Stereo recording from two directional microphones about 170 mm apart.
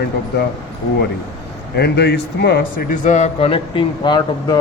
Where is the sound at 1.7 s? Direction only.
75° left (ahead or behind).